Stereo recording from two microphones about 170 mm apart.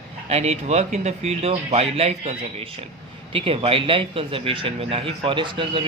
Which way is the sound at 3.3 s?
35° right (ahead or behind).